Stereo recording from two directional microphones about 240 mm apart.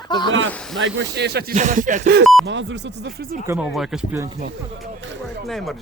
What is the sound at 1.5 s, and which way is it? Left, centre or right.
Speech, right.